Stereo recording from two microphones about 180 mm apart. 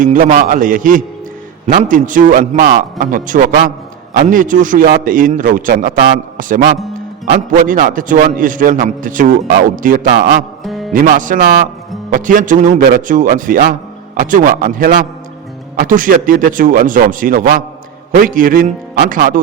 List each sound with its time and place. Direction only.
0.0 s a man's voice: 50° right (ahead or behind)
10.6 s music: centre (ahead or behind)
10.9 s a man's voice: 50° right (ahead or behind)